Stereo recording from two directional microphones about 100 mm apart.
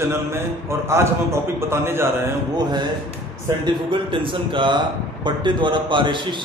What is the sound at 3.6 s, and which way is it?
A man's voice, 60° right (ahead or behind).